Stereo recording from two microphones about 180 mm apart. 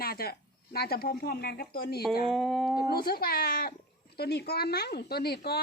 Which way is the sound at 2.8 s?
60° left (ahead or behind).